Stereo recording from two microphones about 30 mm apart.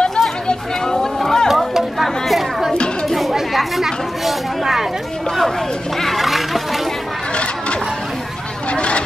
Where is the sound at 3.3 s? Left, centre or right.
Centre.